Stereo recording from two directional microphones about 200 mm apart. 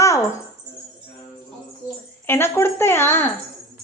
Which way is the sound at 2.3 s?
10° left (ahead or behind).